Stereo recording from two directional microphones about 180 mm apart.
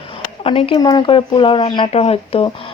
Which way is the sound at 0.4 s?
30° left (ahead or behind).